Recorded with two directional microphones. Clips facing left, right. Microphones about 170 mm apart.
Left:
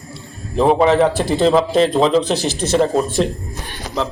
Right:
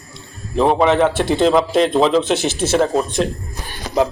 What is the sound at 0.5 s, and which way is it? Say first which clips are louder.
A man's voice: left 1 dB; centre (ahead or behind).